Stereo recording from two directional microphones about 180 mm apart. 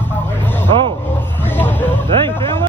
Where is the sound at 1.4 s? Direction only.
10° left (ahead or behind).